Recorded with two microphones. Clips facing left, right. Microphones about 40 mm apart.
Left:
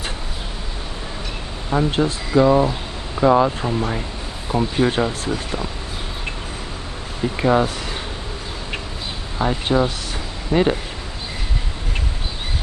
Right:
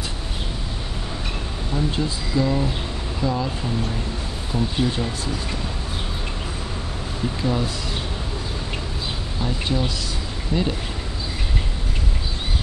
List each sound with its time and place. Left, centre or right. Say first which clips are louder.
1.7 s speech: left 6 dB; left
7.4 s speech: left 8 dB; left
9.4 s speech: left 7 dB; left